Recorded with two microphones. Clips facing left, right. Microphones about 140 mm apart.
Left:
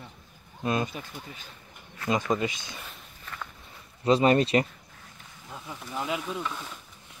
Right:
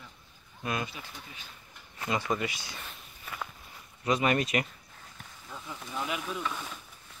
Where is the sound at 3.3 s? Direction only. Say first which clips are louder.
Right 1 dB; 10° right (ahead or behind).